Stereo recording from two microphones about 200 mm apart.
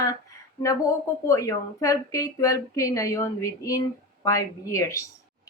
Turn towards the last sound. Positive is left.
turn(degrees=15)  # may be behind; listen again after turning